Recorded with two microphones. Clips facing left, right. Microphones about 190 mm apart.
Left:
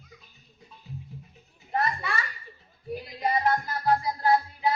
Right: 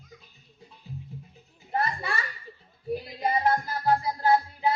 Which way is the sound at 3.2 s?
30° right (ahead or behind).